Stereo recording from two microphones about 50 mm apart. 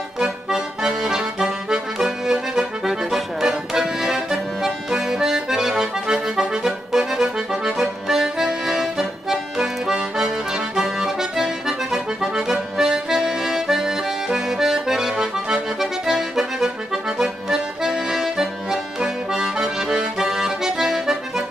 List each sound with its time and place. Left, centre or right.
0.2 s accordion: centre